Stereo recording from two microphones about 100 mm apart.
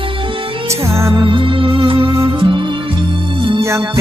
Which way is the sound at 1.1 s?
55° right (ahead or behind).